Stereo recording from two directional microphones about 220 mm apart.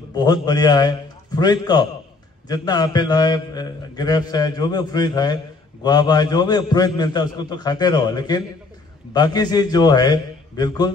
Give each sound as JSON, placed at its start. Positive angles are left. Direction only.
{"t": 0.1, "sound": "a man's voice", "side_deg": 20}